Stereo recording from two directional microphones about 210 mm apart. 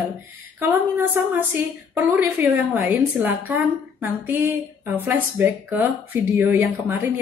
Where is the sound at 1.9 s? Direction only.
10° right (ahead or behind).